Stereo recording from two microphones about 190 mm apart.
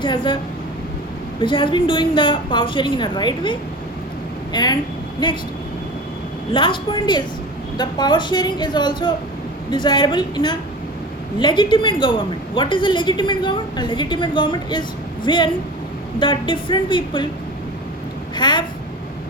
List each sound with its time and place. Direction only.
0.0 s a woman's voice: 25° left (ahead or behind)
1.4 s a woman's voice: 25° left (ahead or behind)
6.5 s a woman's voice: 25° left (ahead or behind)
18.3 s speech: 25° left (ahead or behind)